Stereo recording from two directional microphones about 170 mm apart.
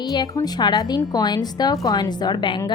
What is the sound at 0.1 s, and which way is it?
A woman's voice, 20° left (ahead or behind).